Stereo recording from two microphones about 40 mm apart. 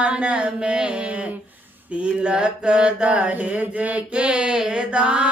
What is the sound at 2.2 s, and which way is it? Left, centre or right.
Mantra, right.